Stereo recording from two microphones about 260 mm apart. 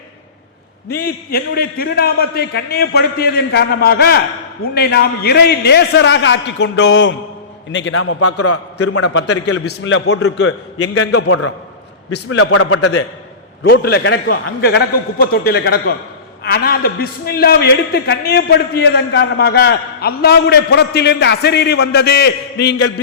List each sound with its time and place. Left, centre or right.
0.9 s a man's voice: left
8.4 s a man's voice: left
11.1 s a man's voice: left
12.3 s a man's voice: left
13.7 s a man's voice: left